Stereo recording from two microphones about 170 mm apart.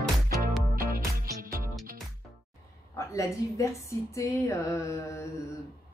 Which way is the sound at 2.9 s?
15° left (ahead or behind).